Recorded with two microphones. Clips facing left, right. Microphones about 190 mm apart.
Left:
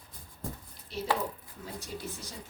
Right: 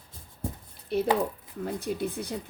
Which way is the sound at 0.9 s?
55° right (ahead or behind).